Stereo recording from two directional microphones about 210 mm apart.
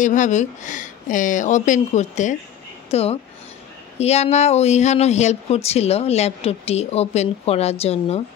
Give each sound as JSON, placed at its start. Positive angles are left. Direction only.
{"t": 0.0, "sound": "speech", "side_deg": 35}